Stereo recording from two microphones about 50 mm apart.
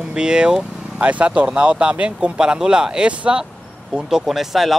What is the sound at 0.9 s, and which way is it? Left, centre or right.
Speech, right.